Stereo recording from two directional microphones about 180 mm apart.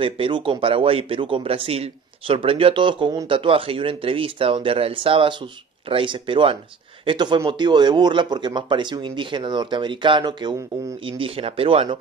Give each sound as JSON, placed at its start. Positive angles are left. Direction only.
{"t": 0.0, "sound": "speech", "side_deg": -30}